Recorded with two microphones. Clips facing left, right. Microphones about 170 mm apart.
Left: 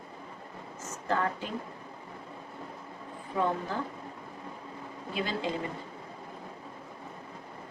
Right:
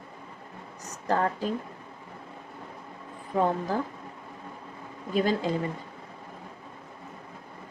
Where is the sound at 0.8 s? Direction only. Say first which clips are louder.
Right 4 dB; 35° right (ahead or behind).